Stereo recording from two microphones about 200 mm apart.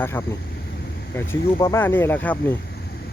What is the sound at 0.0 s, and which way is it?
Speech, 10° left (ahead or behind).